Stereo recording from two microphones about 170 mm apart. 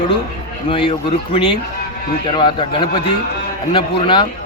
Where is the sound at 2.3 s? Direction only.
30° left (ahead or behind).